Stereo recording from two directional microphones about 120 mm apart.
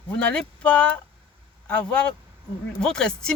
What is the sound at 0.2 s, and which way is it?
Speech, 10° left (ahead or behind).